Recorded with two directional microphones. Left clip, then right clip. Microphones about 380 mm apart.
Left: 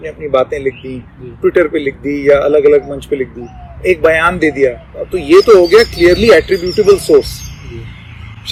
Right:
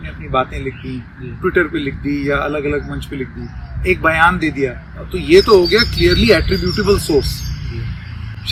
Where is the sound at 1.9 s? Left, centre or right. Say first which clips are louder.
Left 7 dB; centre.